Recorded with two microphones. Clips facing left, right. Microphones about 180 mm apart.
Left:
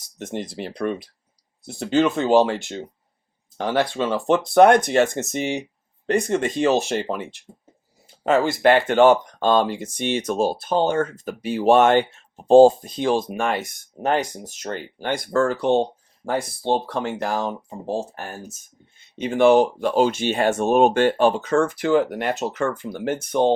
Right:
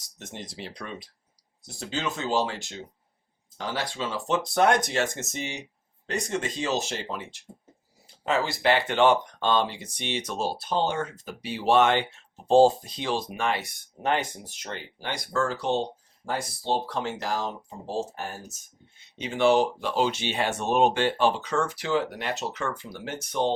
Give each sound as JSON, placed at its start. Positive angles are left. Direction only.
{"t": 0.2, "sound": "speech", "side_deg": 55}
{"t": 19.1, "sound": "speech", "side_deg": 50}